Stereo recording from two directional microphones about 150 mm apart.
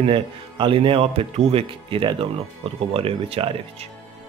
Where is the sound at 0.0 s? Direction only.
35° right (ahead or behind).